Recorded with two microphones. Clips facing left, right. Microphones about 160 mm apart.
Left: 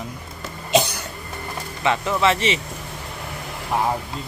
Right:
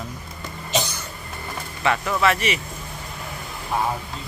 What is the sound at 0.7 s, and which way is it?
Cough, 60° left (ahead or behind).